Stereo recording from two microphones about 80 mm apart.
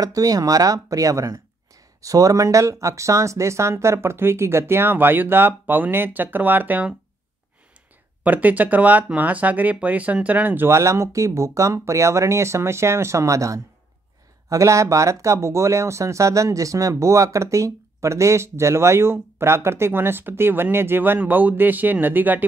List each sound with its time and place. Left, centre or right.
0.0 s speech: right
8.2 s speech: right
10.8 s speech: right